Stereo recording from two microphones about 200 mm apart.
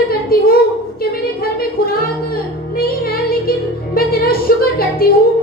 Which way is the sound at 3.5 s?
50° left (ahead or behind).